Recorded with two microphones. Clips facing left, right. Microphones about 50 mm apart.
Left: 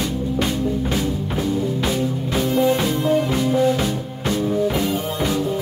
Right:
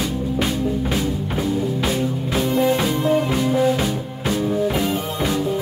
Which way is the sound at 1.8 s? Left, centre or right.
Centre.